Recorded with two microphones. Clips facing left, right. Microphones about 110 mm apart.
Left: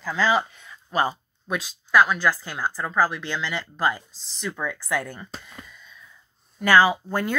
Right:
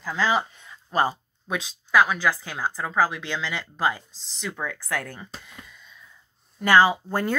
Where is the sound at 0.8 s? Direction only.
25° right (ahead or behind).